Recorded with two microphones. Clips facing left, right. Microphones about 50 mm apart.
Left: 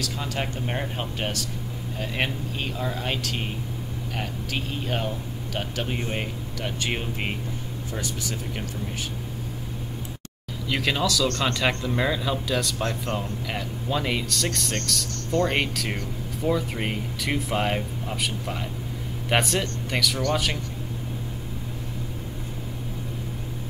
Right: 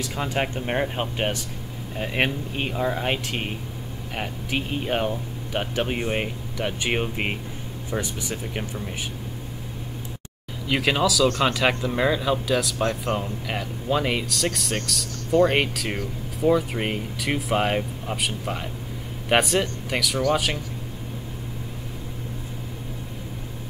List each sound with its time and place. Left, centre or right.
0.0 s speech: right
10.7 s speech: centre